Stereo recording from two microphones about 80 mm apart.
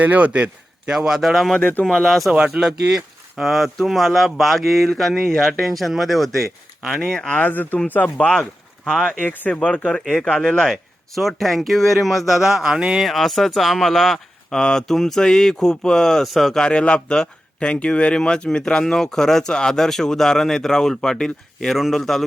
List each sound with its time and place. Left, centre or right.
0.0 s speech: centre
0.9 s speech: centre
2.3 s speech: centre
7.3 s speech: left
9.2 s speech: left
9.6 s speech: centre
16.6 s speech: centre